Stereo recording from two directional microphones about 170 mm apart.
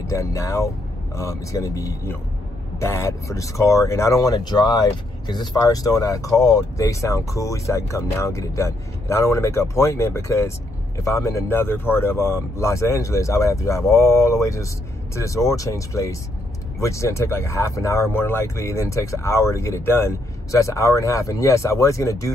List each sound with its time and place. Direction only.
0.0 s speech: 15° left (ahead or behind)